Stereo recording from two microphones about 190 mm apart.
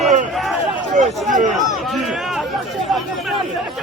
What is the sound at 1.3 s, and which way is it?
Speech, 40° right (ahead or behind).